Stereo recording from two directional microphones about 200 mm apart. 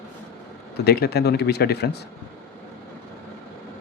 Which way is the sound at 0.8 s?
55° left (ahead or behind).